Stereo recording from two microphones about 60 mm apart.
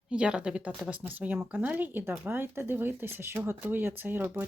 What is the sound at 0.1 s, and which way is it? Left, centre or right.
Speech, centre.